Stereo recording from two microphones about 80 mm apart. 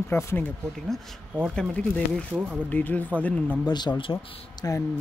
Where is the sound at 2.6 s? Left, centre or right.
Centre.